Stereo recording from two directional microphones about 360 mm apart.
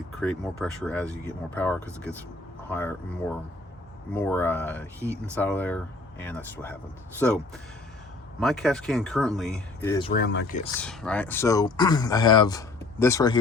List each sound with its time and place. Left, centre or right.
0.2 s speech: centre
5.0 s speech: centre
5.3 s speech: centre
8.4 s speech: centre
10.1 s speech: left
10.8 s speech: centre